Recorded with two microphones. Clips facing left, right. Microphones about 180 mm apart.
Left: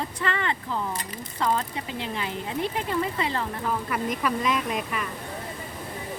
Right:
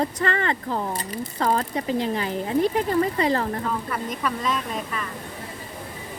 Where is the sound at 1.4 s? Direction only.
45° right (ahead or behind).